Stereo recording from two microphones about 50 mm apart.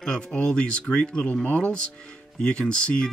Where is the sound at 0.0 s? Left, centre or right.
Centre.